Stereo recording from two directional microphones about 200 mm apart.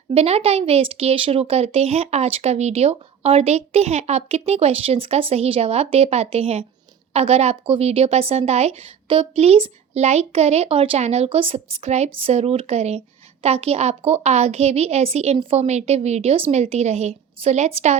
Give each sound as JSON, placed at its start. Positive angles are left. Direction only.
{"t": 0.1, "sound": "speech", "side_deg": -30}